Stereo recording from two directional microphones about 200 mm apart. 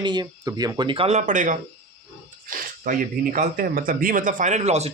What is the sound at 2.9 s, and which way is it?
Speech, 45° right (ahead or behind).